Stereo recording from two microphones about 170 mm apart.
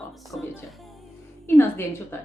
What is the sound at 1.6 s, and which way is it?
Speech, 15° left (ahead or behind).